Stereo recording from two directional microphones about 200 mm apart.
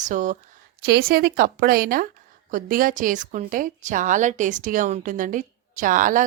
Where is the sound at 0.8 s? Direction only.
50° right (ahead or behind).